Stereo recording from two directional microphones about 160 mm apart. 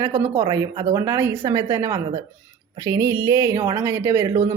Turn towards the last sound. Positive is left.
turn(degrees=-15)  # may be behind; listen again after turning